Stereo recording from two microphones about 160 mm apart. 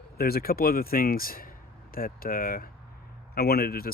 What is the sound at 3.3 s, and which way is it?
Speech, 75° left (ahead or behind).